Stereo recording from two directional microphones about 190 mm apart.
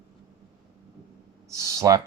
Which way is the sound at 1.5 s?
15° right (ahead or behind).